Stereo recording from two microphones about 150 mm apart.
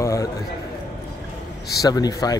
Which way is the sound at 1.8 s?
25° left (ahead or behind).